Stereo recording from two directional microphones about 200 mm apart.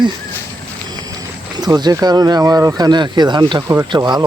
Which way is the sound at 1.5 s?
20° right (ahead or behind).